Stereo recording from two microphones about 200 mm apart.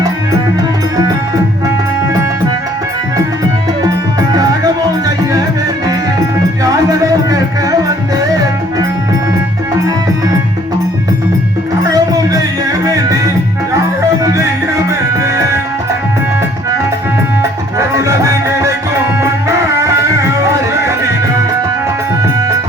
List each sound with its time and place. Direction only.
3.8 s music: 20° right (ahead or behind)
7.3 s music: 15° right (ahead or behind)
11.8 s music: 20° right (ahead or behind)
17.7 s music: 15° right (ahead or behind)